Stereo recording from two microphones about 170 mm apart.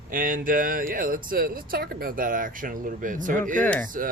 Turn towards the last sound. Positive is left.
turn(degrees=-55)  # may be behind; listen again after turning